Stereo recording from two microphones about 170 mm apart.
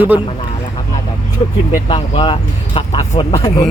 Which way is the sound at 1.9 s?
30° left (ahead or behind).